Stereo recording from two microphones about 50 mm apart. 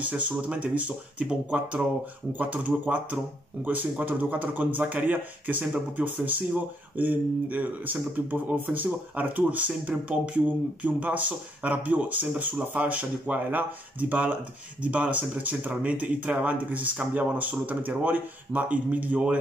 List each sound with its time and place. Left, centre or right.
0.0 s speech: right
2.3 s speech: right